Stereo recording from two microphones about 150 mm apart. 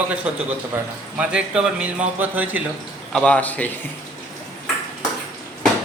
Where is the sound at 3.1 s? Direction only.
5° left (ahead or behind).